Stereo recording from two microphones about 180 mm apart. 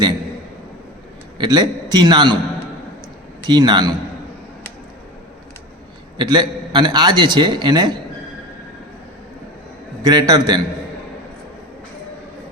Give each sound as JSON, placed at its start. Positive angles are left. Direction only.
{"t": 1.4, "sound": "a man's voice", "side_deg": -25}
{"t": 3.4, "sound": "a man's voice", "side_deg": -25}
{"t": 6.1, "sound": "a man's voice", "side_deg": -25}
{"t": 10.1, "sound": "a man's voice", "side_deg": -20}